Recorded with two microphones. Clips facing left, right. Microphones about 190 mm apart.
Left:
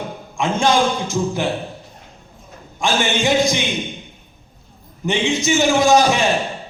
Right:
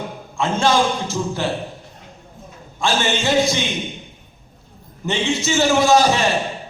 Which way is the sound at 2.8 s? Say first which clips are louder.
Left 1 dB; 15° left (ahead or behind).